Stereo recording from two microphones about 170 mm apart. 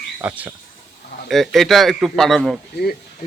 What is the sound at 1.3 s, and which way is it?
A man's voice, centre (ahead or behind).